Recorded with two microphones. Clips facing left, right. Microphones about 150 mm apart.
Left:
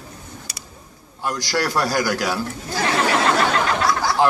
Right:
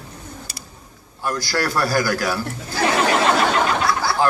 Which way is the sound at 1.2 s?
20° left (ahead or behind).